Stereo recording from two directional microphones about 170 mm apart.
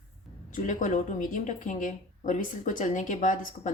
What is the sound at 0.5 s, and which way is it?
A woman's voice, 50° left (ahead or behind).